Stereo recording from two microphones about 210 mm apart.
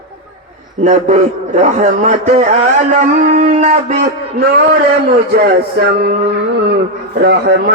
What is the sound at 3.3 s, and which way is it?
Speech, 35° right (ahead or behind).